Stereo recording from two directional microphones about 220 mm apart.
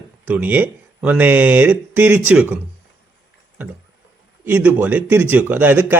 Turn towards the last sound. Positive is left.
turn(degrees=-10)  # may be behind; listen again after turning